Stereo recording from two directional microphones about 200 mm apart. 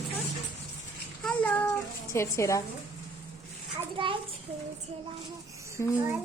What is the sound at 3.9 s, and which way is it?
Speech, 25° right (ahead or behind).